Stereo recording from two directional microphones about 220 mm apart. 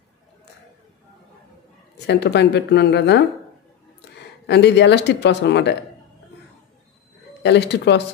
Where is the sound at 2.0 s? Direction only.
50° left (ahead or behind).